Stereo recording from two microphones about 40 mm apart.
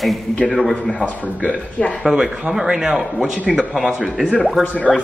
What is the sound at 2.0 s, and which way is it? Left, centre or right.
Speech, centre.